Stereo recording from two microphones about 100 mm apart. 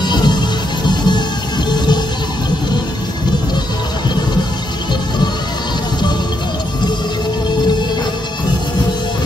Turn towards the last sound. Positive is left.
turn(degrees=50)  # may be behind; listen again after turning